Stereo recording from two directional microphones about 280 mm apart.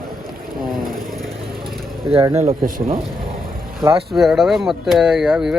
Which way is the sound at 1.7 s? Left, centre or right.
Centre.